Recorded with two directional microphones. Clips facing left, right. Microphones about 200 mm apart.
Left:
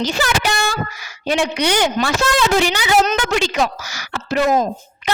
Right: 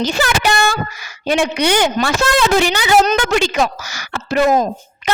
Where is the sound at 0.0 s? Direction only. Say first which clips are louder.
Right 2 dB; 55° right (ahead or behind).